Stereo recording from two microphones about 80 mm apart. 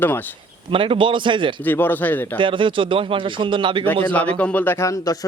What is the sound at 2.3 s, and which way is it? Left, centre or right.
Speech, right.